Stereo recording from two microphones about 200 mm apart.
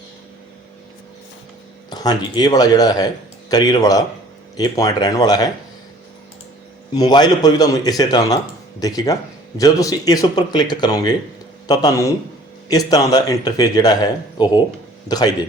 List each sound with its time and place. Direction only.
1.9 s a man's voice: 20° left (ahead or behind)
6.9 s a man's voice: 20° left (ahead or behind)